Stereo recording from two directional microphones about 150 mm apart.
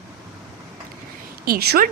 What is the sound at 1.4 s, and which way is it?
Speech, 90° right.